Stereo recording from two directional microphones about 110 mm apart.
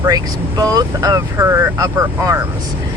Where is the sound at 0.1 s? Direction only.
35° right (ahead or behind).